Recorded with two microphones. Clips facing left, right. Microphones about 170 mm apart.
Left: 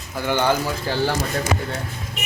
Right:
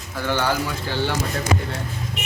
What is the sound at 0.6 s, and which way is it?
Speech, 40° left (ahead or behind).